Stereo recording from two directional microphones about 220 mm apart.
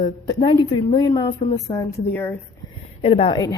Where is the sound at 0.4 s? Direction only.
25° left (ahead or behind).